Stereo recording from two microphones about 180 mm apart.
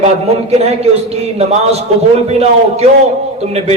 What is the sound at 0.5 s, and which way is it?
A man's voice, 35° right (ahead or behind).